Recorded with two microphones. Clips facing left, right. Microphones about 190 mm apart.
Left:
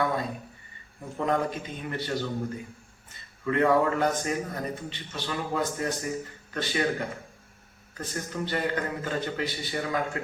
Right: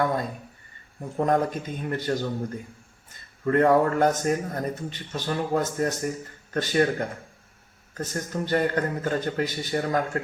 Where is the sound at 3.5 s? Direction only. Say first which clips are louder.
Right 3 dB; 45° right (ahead or behind).